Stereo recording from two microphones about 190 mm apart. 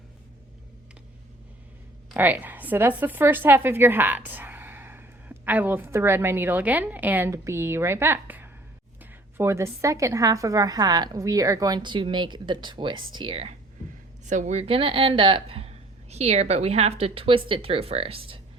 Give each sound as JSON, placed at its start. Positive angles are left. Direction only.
{"t": 2.1, "sound": "a woman's voice", "side_deg": -10}
{"t": 14.3, "sound": "speech", "side_deg": -40}